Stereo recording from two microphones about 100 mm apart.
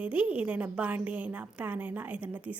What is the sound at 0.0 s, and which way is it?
A woman's voice, 15° right (ahead or behind).